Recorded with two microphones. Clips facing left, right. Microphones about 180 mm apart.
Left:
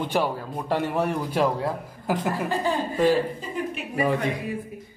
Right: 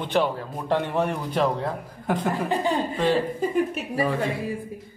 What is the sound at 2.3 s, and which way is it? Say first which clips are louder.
Speech: right 2 dB; 20° right (ahead or behind).